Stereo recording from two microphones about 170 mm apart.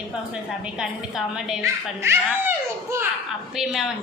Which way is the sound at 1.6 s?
15° right (ahead or behind).